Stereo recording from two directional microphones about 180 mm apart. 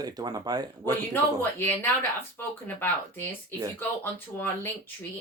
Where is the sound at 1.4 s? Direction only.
10° left (ahead or behind).